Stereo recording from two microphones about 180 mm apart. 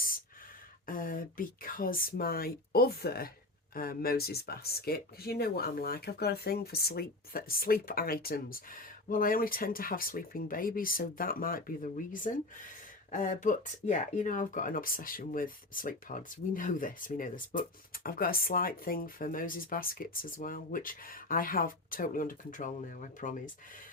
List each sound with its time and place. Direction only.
0.9 s speech: 50° left (ahead or behind)